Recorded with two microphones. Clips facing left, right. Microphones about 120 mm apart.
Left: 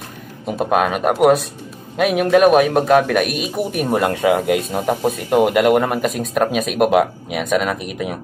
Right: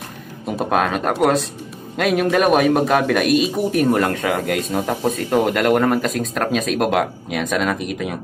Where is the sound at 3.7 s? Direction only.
15° left (ahead or behind).